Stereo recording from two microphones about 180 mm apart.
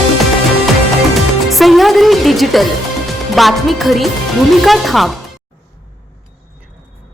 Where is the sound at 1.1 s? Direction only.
Centre (ahead or behind).